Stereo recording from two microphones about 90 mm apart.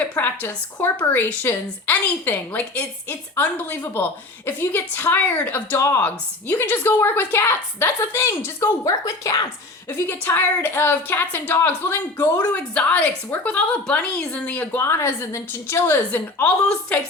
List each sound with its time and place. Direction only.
0.0 s a woman's voice: 20° left (ahead or behind)
5.7 s a woman's voice: 30° left (ahead or behind)
6.1 s a woman's voice: 20° left (ahead or behind); by 9.5 s 45° left (ahead or behind)
9.9 s a woman's voice: 25° left (ahead or behind)